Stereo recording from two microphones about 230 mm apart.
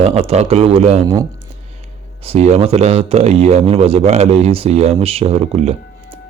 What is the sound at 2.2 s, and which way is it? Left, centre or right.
Speech, right.